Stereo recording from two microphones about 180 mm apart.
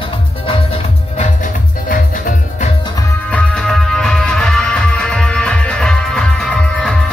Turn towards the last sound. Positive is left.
turn(degrees=5)  # may be behind; listen again after turning